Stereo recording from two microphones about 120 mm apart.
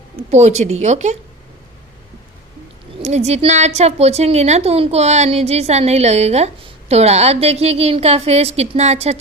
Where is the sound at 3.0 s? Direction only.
65° right (ahead or behind).